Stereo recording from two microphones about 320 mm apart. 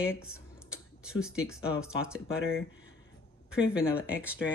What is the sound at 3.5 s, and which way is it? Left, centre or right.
Speech, centre.